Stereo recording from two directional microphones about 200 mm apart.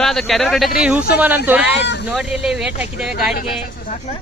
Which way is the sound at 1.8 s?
60° left (ahead or behind).